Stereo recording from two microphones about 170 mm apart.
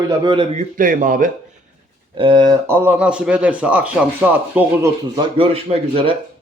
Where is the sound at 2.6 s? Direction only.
15° right (ahead or behind).